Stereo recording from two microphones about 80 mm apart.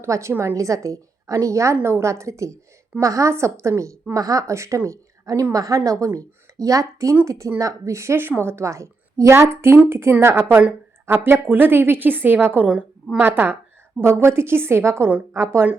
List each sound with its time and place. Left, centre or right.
0.0 s a woman's voice: right